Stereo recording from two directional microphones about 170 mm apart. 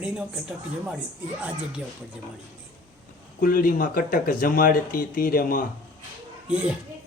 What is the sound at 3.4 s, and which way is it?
Speech, 55° left (ahead or behind).